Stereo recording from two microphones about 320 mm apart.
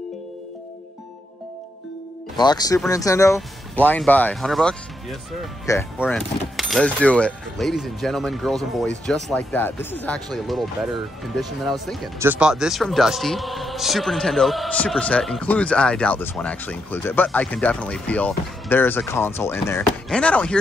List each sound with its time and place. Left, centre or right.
2.3 s speech: centre
5.9 s speech: centre